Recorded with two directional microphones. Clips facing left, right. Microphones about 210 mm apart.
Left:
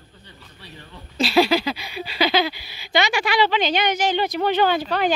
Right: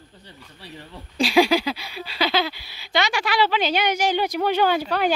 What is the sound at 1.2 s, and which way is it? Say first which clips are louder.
Speech: even; 10° right (ahead or behind).